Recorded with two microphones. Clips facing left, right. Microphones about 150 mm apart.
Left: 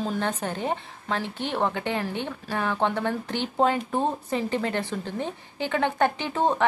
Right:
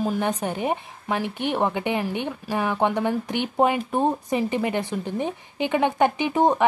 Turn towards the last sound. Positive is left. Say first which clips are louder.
# right 4 dB
turn(degrees=-15)  # may be behind; listen again after turning